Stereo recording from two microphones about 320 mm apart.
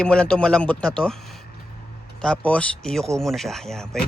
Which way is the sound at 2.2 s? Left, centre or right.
Centre.